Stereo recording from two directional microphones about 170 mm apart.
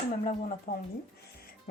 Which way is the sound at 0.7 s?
70° left (ahead or behind).